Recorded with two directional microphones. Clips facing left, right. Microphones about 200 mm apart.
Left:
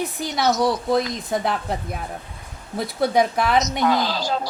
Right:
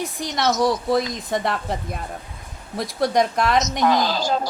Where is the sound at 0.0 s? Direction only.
Centre (ahead or behind).